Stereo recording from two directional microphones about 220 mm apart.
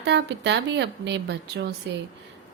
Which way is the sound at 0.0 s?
50° right (ahead or behind).